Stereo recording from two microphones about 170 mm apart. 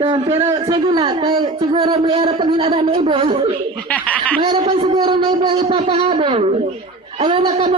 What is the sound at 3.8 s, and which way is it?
Speech, 10° left (ahead or behind).